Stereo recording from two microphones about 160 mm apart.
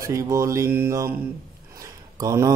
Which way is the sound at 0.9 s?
20° right (ahead or behind).